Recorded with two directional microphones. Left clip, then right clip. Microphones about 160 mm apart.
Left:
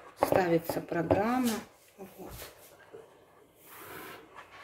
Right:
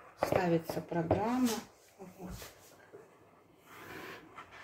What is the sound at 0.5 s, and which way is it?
Speech, 50° left (ahead or behind).